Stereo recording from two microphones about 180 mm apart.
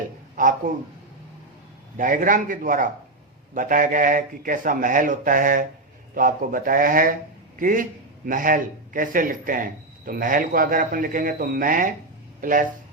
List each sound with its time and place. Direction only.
0.4 s a man's voice: 45° right (ahead or behind)
2.0 s speech: 45° right (ahead or behind)